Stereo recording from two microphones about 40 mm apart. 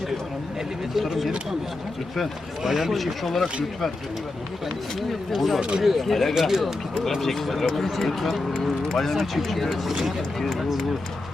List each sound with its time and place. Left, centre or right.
0.9 s speech: centre
2.6 s speech: centre
2.9 s speech: centre
4.9 s speech: centre
5.5 s speech: right
5.8 s speech: centre
6.5 s speech: centre
7.2 s speech: centre